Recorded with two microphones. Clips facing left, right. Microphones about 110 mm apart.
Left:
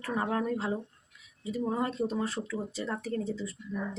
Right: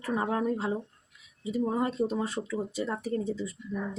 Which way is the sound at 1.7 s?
20° right (ahead or behind).